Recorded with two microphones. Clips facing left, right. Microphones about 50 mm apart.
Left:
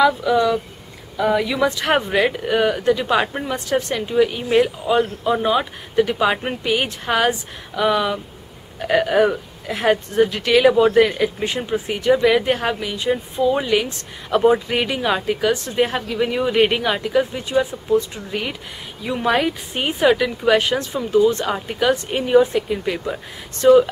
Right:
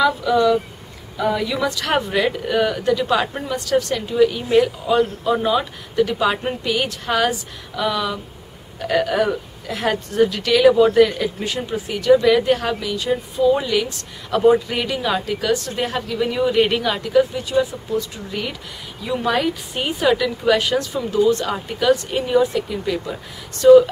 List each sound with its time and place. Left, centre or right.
0.0 s a woman's voice: centre